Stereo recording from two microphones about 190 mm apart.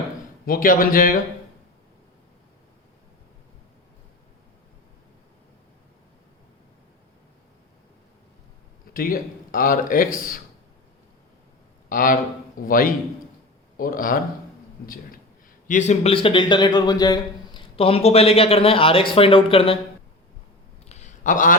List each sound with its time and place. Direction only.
0.4 s speech: 50° left (ahead or behind)
8.9 s speech: 50° left (ahead or behind)
11.9 s speech: 45° left (ahead or behind)
15.6 s a man's voice: 40° left (ahead or behind)
20.9 s a sound: 40° left (ahead or behind)